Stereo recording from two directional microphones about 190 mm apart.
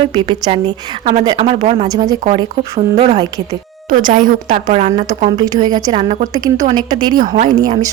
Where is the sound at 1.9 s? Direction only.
20° right (ahead or behind).